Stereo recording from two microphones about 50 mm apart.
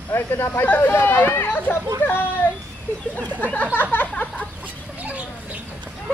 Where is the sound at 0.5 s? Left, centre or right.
Left.